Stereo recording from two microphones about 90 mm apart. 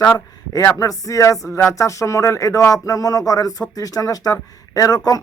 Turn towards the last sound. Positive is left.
turn(degrees=45)  # may be behind; listen again after turning